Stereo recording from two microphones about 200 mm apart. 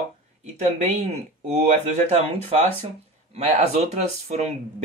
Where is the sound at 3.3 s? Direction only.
35° right (ahead or behind).